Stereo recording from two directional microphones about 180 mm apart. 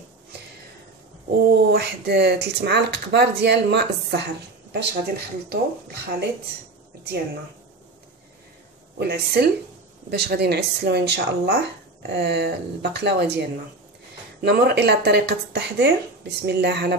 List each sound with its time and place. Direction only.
1.5 s speech: 65° right (ahead or behind)
9.0 s speech: 65° right (ahead or behind)